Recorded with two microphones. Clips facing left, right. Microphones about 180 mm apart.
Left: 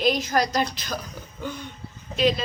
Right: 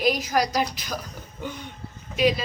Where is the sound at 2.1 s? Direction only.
10° right (ahead or behind).